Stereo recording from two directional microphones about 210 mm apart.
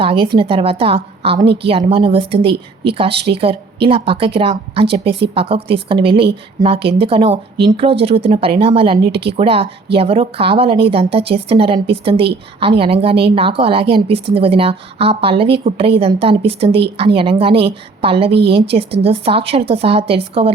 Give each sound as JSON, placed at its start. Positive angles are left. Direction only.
{"t": 0.0, "sound": "a woman's voice", "side_deg": -25}